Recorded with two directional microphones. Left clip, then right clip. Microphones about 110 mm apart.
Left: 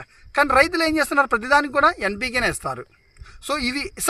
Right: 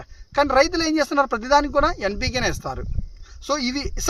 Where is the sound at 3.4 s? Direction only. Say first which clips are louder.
Even; 40° right (ahead or behind).